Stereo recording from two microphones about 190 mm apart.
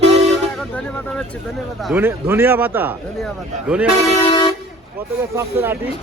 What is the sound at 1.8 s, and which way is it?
Speech, 5° right (ahead or behind).